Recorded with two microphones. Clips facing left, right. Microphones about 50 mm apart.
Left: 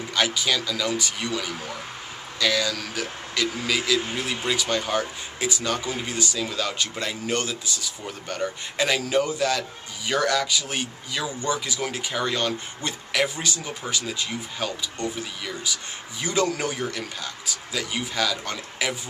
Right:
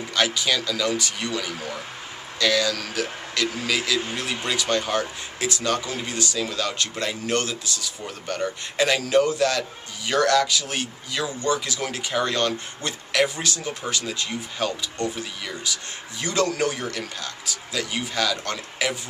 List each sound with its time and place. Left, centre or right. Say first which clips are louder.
0.1 s a man's voice: right 1 dB; centre